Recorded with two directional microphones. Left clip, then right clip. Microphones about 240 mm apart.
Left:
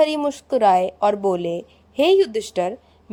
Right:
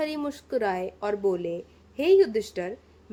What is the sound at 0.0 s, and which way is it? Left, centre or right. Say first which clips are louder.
A woman's voice: left 11 dB; left.